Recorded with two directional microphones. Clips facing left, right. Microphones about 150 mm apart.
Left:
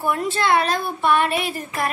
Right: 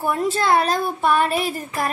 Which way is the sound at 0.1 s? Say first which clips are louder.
Right 1 dB; 35° right (ahead or behind).